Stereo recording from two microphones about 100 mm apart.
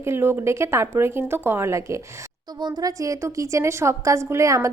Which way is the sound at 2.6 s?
45° right (ahead or behind).